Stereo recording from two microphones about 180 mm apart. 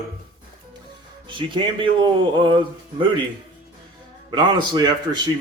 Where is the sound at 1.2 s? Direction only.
25° right (ahead or behind).